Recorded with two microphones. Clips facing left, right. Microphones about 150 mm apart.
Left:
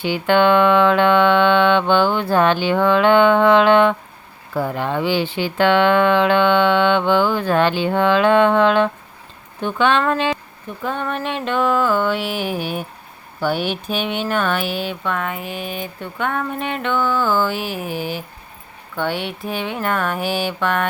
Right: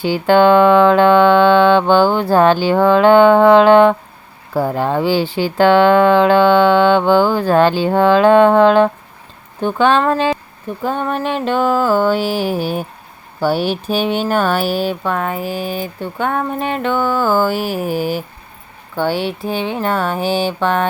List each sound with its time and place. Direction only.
0.0 s speech: 35° right (ahead or behind)